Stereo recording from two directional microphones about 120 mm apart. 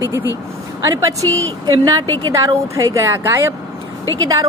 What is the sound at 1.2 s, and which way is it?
A woman's voice, 30° right (ahead or behind).